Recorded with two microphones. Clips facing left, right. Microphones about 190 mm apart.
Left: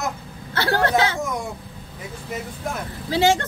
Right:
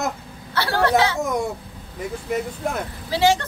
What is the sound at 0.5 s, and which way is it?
Speech, 50° left (ahead or behind).